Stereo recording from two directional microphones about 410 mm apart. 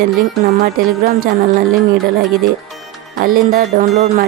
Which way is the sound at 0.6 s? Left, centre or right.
Right.